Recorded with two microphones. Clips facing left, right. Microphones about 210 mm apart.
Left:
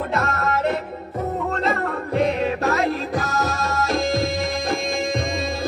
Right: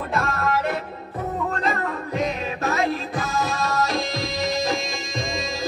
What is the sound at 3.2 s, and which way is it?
Music, 40° left (ahead or behind).